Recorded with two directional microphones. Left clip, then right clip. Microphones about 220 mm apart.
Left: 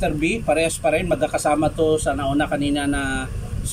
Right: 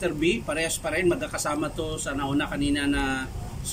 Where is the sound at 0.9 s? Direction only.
Centre (ahead or behind).